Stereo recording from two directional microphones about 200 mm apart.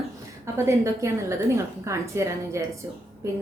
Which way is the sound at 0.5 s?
15° right (ahead or behind).